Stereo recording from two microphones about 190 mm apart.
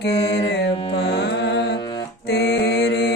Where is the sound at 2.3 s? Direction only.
60° left (ahead or behind).